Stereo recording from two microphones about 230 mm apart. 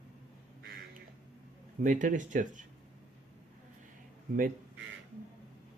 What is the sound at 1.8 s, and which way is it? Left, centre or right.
Speech, right.